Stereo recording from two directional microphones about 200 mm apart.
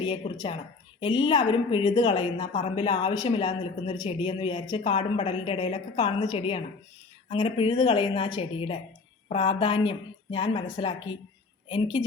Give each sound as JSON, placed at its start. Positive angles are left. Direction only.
{"t": 0.0, "sound": "speech", "side_deg": 25}